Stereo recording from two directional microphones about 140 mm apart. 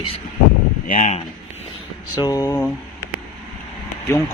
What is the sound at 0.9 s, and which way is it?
Speech, 55° left (ahead or behind).